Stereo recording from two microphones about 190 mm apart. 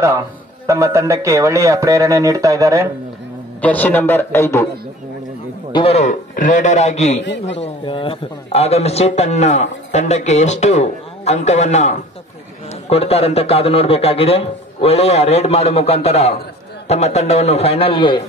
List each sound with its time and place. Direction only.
0.7 s speech: 15° right (ahead or behind)
3.6 s a man's voice: 10° left (ahead or behind)
5.7 s a man's voice: 30° left (ahead or behind)
7.6 s a man's voice: 25° left (ahead or behind)